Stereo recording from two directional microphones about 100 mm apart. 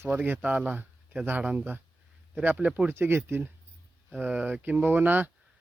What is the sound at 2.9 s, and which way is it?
Speech, 25° right (ahead or behind).